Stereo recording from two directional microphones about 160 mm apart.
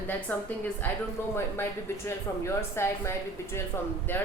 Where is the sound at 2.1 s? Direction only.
15° left (ahead or behind).